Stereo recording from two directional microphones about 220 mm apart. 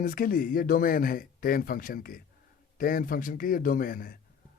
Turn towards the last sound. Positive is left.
turn(degrees=40)  # may be behind; listen again after turning